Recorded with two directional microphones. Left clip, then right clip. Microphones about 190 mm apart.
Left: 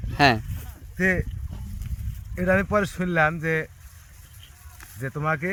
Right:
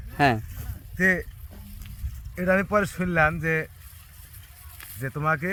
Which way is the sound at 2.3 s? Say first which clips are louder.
Even; 5° left (ahead or behind).